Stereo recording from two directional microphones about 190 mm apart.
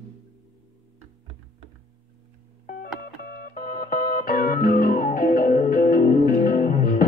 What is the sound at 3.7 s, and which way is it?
Music, 50° left (ahead or behind).